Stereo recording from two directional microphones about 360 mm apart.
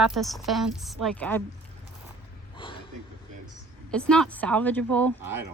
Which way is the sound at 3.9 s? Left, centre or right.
Centre.